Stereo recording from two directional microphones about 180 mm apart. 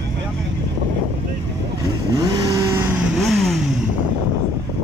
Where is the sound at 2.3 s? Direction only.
20° right (ahead or behind).